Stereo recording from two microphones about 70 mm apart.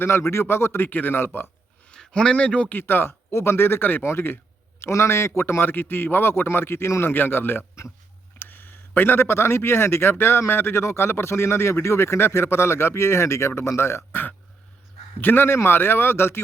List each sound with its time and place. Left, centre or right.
0.0 s speech: left
0.9 s speech: left
1.9 s speech: centre; by 16.4 s left